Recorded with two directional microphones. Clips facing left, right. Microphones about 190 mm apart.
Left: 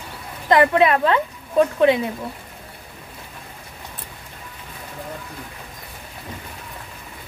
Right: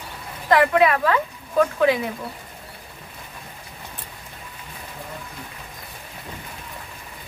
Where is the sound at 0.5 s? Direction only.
25° left (ahead or behind).